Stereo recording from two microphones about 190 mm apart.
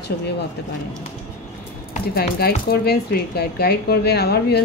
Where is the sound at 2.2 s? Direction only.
55° left (ahead or behind).